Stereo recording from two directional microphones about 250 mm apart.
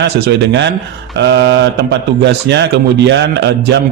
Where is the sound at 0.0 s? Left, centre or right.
Right.